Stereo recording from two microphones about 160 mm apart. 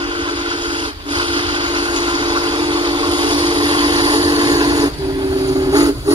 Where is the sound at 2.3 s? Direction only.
30° right (ahead or behind).